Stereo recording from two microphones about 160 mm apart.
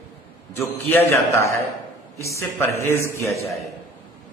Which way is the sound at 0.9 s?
15° left (ahead or behind).